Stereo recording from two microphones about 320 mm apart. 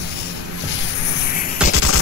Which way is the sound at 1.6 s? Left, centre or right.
Centre.